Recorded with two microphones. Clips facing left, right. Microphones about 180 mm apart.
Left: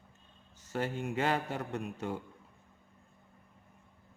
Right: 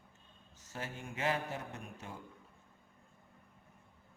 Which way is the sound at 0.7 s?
65° left (ahead or behind).